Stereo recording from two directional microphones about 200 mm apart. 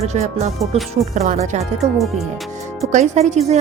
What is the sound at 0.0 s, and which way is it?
A woman's voice, 35° right (ahead or behind).